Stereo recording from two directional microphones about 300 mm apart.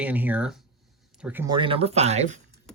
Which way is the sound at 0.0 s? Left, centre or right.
Centre.